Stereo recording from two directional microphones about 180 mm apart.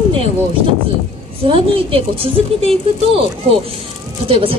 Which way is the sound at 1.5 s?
30° right (ahead or behind).